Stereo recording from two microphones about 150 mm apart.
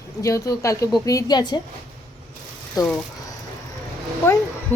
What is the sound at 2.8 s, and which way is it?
Speech, 25° left (ahead or behind).